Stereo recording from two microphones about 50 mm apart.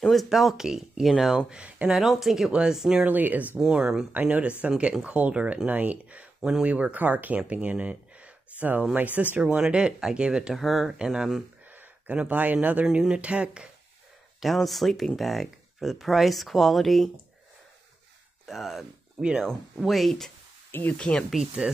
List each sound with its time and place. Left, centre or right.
0.1 s speech: centre
1.5 s speech: right
2.0 s speech: centre
3.1 s speech: right
3.5 s speech: centre
4.1 s speech: right
9.6 s speech: centre
10.5 s speech: centre
12.1 s speech: right
14.4 s speech: centre
18.5 s speech: centre
20.9 s speech: left